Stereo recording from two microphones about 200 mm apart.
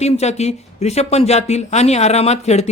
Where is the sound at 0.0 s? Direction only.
35° left (ahead or behind).